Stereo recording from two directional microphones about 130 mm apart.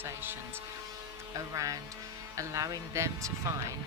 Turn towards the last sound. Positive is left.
turn(degrees=-20)  # may be behind; listen again after turning